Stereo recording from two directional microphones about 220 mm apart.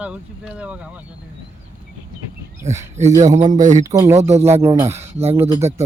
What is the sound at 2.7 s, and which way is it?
Music, 10° right (ahead or behind).